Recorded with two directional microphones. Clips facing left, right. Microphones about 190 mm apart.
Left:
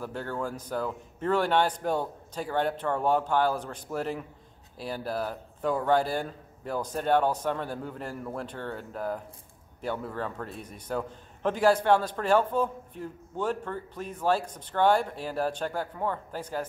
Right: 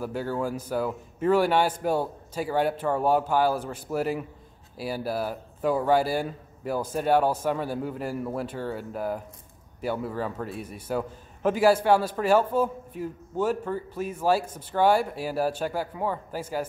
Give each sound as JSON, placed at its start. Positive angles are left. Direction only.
{"t": 0.0, "sound": "a man's voice", "side_deg": -10}